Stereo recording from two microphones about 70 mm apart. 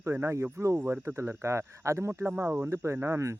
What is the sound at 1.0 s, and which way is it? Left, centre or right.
Speech, right.